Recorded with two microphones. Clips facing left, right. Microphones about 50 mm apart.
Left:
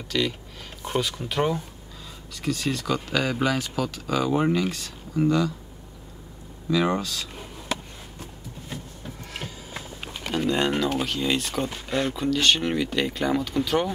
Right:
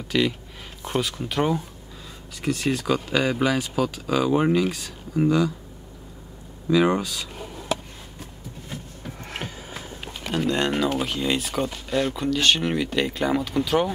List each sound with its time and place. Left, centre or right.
0.1 s speech: centre
0.8 s speech: centre
2.4 s speech: centre
6.7 s speech: centre
9.2 s a sound: right
10.3 s speech: centre